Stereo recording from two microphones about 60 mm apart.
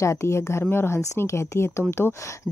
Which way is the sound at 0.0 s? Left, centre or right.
Left.